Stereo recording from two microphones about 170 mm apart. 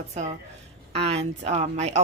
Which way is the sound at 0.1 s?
40° right (ahead or behind).